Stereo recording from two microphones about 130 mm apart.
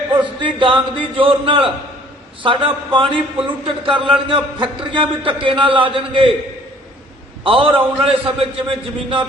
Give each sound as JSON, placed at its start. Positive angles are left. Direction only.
{"t": 0.1, "sound": "a man's voice", "side_deg": -35}
{"t": 7.4, "sound": "a man's voice", "side_deg": -45}